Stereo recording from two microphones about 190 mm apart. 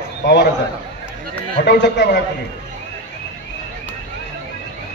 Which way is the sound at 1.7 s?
65° left (ahead or behind).